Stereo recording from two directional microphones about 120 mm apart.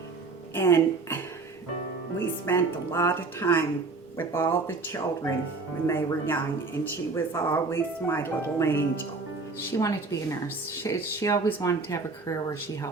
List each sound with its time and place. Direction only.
0.5 s a woman's voice: 25° left (ahead or behind)